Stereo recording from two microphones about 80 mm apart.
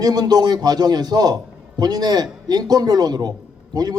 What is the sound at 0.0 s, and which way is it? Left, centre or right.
A man's voice, right.